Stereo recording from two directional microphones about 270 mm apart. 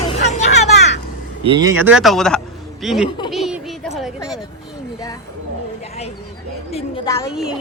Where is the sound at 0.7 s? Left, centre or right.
Left.